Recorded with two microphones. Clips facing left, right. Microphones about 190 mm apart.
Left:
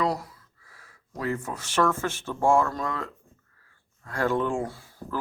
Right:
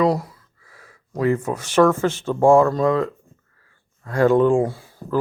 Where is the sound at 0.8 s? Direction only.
75° right (ahead or behind).